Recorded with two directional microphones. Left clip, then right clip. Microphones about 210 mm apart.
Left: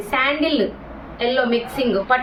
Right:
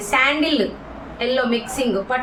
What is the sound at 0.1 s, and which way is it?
A woman's voice, 10° right (ahead or behind).